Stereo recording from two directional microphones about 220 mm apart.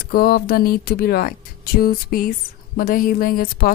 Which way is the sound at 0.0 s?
45° left (ahead or behind).